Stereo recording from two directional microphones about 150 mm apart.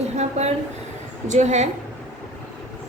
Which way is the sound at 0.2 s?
45° right (ahead or behind).